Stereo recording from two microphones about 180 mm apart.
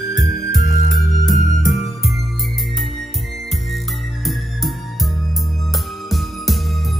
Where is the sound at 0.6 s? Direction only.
45° left (ahead or behind).